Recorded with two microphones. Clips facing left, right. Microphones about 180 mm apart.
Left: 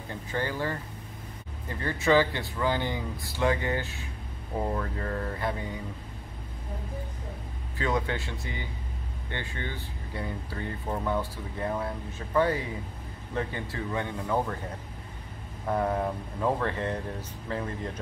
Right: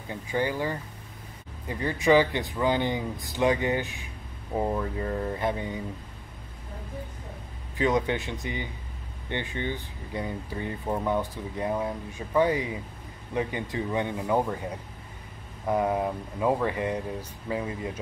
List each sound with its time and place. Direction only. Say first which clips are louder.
0.1 s speech: right 4 dB; 15° right (ahead or behind)
7.7 s speech: right 4 dB; 20° right (ahead or behind)
15.6 s speech: right 2 dB; 10° right (ahead or behind)